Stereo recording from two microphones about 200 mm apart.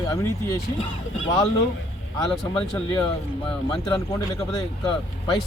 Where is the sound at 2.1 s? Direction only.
15° left (ahead or behind).